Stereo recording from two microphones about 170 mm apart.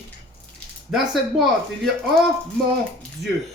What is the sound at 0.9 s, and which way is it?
Speech, centre (ahead or behind).